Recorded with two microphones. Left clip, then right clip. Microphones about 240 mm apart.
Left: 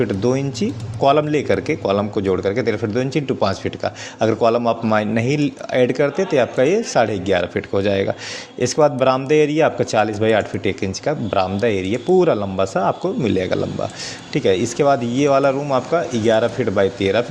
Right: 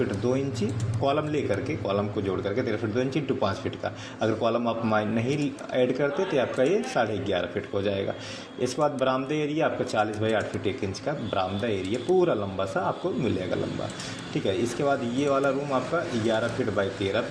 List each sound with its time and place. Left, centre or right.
0.2 s a man's voice: left